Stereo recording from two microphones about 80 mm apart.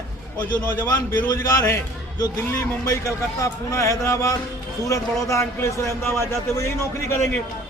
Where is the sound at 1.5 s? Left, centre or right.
Left.